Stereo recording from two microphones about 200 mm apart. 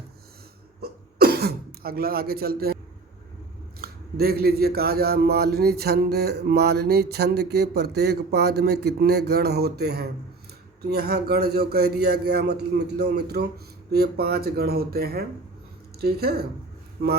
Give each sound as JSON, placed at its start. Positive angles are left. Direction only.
{"t": 0.8, "sound": "throat clearing", "side_deg": -50}
{"t": 3.8, "sound": "a man's voice", "side_deg": -50}